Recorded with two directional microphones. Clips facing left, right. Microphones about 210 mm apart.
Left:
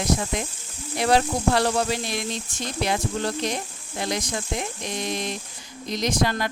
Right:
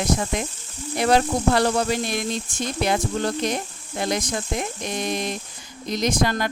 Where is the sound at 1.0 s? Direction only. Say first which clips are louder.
Right 2 dB; 50° right (ahead or behind).